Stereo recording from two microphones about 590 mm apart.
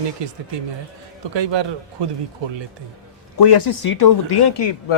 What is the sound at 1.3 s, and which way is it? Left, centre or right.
Speech, right.